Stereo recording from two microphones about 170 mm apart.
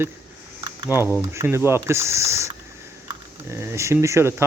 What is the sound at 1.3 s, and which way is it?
Speech, 15° right (ahead or behind).